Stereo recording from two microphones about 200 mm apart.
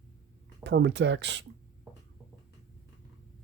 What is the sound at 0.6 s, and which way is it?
Speech, 60° right (ahead or behind).